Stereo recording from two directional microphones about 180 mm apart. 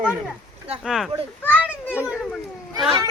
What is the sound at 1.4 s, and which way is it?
Speech, 10° left (ahead or behind).